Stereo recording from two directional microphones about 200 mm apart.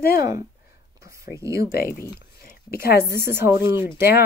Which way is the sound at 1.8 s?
50° left (ahead or behind).